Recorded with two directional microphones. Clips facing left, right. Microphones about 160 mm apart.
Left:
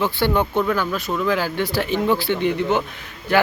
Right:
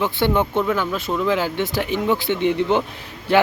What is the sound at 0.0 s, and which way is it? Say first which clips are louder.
A man's voice: even; 20° right (ahead or behind).